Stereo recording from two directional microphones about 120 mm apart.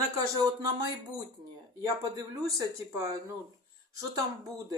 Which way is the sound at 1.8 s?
30° right (ahead or behind).